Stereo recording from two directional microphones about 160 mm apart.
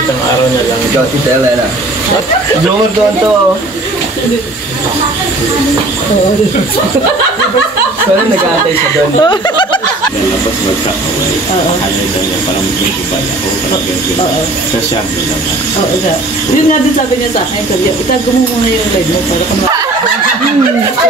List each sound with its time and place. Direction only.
9.2 s speech: 30° left (ahead or behind)